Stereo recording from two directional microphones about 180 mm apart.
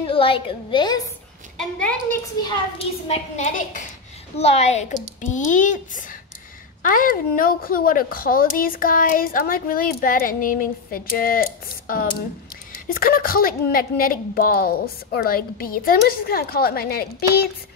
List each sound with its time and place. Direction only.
0.1 s a woman's voice: 30° left (ahead or behind)
1.6 s a woman's voice: 5° left (ahead or behind)
2.4 s a child's voice: 35° left (ahead or behind); by 11.4 s 55° left (ahead or behind)
12.7 s a woman's voice: 50° left (ahead or behind)